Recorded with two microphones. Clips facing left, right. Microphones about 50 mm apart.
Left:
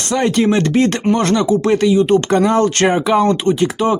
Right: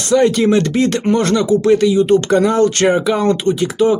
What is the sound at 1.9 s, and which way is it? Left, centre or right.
Speech, centre.